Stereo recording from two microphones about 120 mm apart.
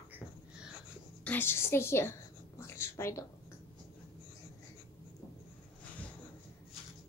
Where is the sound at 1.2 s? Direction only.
15° left (ahead or behind).